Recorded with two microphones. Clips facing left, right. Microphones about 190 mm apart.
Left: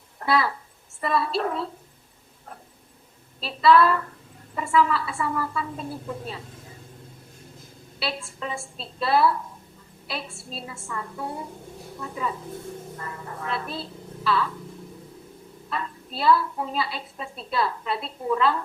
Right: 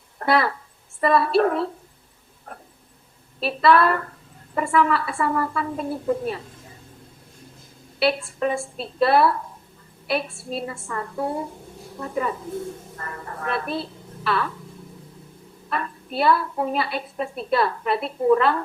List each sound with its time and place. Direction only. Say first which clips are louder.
0.2 s a woman's voice: right 3 dB; 60° right (ahead or behind)
3.4 s a woman's voice: even; 60° right (ahead or behind)
7.9 s a woman's voice: right 10 dB; 60° right (ahead or behind)
15.7 s a woman's voice: right 5 dB; 60° right (ahead or behind)